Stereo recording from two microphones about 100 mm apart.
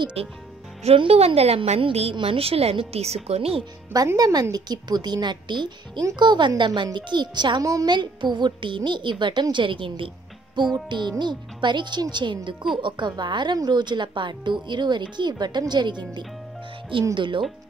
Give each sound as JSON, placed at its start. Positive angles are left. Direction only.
{"t": 0.8, "sound": "a woman's voice", "side_deg": -80}
{"t": 4.2, "sound": "speech", "side_deg": -40}